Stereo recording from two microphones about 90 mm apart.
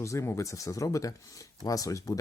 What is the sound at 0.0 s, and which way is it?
Speech, 35° left (ahead or behind).